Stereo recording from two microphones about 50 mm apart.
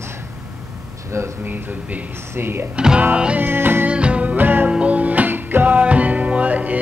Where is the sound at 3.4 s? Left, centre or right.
Right.